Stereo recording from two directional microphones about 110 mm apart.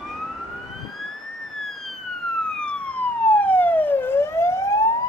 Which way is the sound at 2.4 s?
10° left (ahead or behind).